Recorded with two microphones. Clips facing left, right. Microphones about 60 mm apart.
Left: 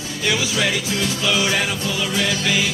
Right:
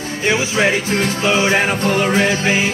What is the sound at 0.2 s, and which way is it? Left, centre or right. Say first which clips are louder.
Music: right 5 dB; right.